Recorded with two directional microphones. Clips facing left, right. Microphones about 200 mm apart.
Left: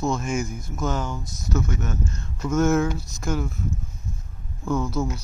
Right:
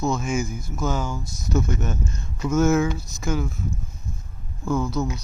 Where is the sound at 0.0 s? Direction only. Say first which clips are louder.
Right 1 dB; 5° right (ahead or behind).